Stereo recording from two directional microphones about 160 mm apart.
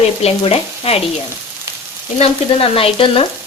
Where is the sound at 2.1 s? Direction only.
35° left (ahead or behind).